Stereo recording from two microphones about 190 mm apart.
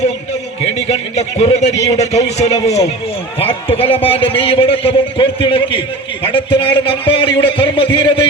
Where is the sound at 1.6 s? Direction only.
35° left (ahead or behind).